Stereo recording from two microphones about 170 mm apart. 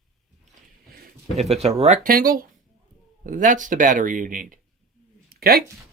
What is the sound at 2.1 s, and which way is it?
Speech, 60° right (ahead or behind).